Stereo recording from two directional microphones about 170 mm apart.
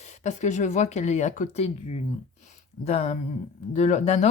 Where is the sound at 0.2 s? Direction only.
45° left (ahead or behind).